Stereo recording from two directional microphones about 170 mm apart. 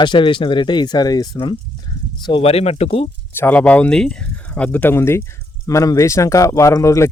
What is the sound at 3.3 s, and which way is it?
Speech, 10° left (ahead or behind).